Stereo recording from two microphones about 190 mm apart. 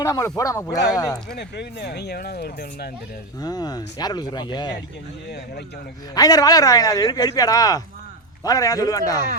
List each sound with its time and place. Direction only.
0.0 s a man's voice: 15° left (ahead or behind)
1.3 s speech: 60° left (ahead or behind)
3.4 s speech: 20° left (ahead or behind)
6.1 s a man's voice: 20° left (ahead or behind)